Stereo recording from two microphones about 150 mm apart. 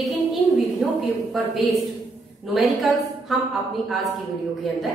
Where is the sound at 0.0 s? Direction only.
Centre (ahead or behind).